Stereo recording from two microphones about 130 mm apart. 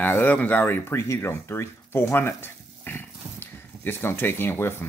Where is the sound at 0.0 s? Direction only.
15° left (ahead or behind).